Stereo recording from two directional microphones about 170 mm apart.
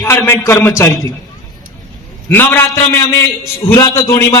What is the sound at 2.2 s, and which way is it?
A man's voice, 10° left (ahead or behind).